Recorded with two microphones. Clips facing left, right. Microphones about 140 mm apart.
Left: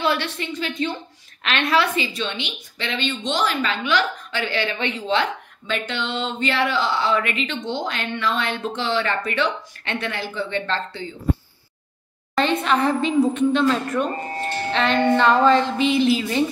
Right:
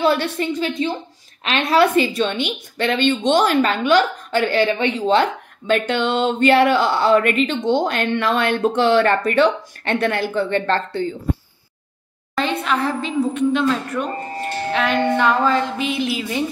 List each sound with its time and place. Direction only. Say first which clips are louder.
0.0 s a woman's voice: right 5 dB; 40° right (ahead or behind)
12.4 s speech: left 1 dB; 5° right (ahead or behind)